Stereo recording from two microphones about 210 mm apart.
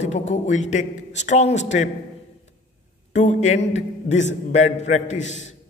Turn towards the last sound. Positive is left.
turn(degrees=35)  # may be behind; listen again after turning